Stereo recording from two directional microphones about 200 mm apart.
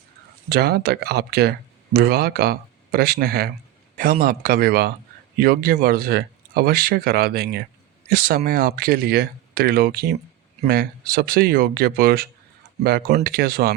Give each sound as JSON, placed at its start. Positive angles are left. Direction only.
{"t": 0.5, "sound": "speech", "side_deg": -55}